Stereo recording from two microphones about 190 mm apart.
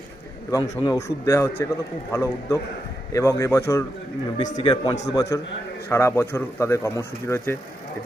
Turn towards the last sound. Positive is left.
turn(degrees=10)  # may be behind; listen again after turning